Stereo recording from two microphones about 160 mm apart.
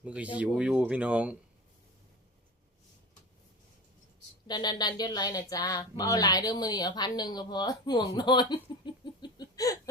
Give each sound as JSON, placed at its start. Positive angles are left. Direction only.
{"t": 0.0, "sound": "speech", "side_deg": -10}
{"t": 4.4, "sound": "speech", "side_deg": 25}